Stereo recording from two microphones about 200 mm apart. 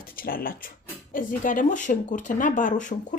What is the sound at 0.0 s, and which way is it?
Speech, 45° left (ahead or behind).